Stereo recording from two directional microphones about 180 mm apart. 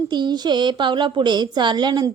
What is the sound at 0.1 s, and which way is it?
A woman's voice, 25° right (ahead or behind).